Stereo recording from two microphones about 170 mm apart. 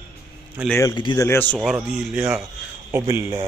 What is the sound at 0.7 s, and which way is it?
Speech, 15° left (ahead or behind).